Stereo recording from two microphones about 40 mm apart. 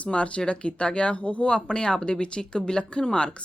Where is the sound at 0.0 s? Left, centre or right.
Left.